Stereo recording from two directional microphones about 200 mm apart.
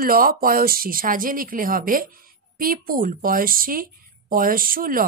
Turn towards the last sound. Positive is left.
turn(degrees=-45)  # may be behind; listen again after turning